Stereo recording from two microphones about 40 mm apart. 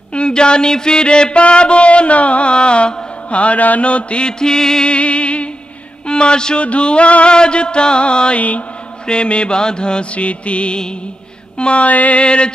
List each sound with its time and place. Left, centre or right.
0.1 s mantra: left
4.9 s music: left
6.0 s a man's voice: left
6.6 s a sound: left
7.3 s mantra: left
8.4 s a sound: left
9.0 s mantra: left
11.5 s a sound: left
12.2 s mantra: left